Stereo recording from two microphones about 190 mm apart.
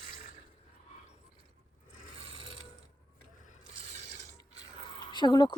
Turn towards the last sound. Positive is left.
turn(degrees=25)  # may be behind; listen again after turning